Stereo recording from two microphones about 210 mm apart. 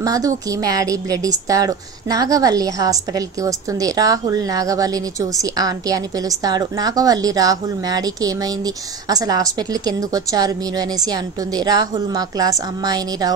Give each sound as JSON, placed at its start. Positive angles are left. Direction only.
{"t": 0.0, "sound": "a woman's voice", "side_deg": -15}